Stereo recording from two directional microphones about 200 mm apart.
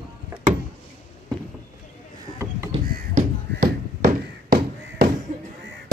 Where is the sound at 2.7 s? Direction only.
40° right (ahead or behind).